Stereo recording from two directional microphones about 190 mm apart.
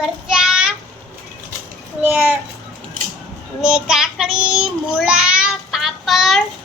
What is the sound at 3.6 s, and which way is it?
Child singing, 5° right (ahead or behind).